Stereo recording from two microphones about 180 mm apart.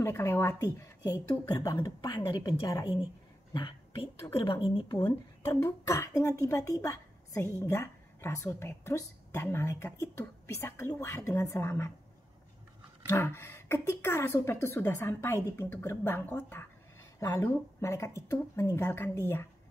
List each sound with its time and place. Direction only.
0.0 s a woman's voice: 15° left (ahead or behind)
13.1 s speech: 15° left (ahead or behind)